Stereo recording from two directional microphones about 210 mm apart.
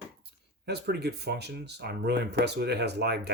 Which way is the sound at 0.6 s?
50° right (ahead or behind).